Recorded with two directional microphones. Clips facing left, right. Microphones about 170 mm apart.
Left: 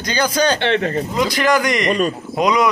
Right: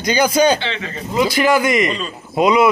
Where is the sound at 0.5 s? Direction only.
60° left (ahead or behind).